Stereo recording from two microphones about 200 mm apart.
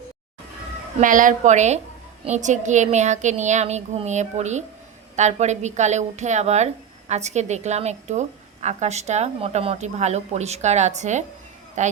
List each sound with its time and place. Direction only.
0.9 s a woman's voice: 40° right (ahead or behind)